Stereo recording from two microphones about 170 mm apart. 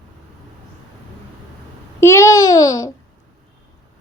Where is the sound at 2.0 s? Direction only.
15° left (ahead or behind).